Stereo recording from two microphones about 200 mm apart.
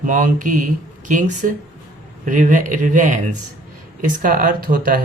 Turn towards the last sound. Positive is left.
turn(degrees=-45)  # may be behind; listen again after turning